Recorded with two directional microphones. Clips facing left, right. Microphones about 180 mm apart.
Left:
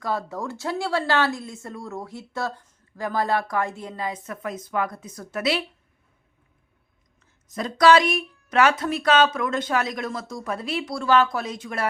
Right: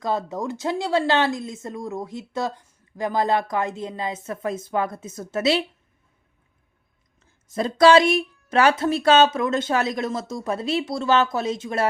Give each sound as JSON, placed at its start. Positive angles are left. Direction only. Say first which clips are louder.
{"t": 0.0, "sound": "a woman's voice", "louder": "right 3 dB", "side_deg": -20}
{"t": 7.4, "sound": "a woman's voice", "louder": "right 2 dB", "side_deg": -30}